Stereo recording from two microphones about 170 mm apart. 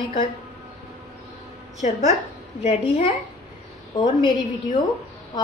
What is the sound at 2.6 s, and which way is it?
Speech, 40° left (ahead or behind).